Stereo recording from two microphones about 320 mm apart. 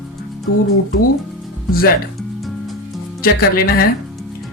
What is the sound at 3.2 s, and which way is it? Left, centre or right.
Speech, left.